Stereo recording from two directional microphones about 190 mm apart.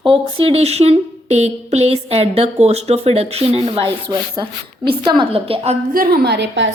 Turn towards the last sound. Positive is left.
turn(degrees=-70)  # may be behind; listen again after turning